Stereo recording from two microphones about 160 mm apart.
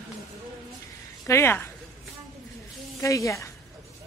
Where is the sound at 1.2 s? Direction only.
15° left (ahead or behind).